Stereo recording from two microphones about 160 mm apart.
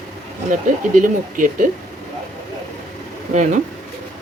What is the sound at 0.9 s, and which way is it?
Speech, 55° right (ahead or behind).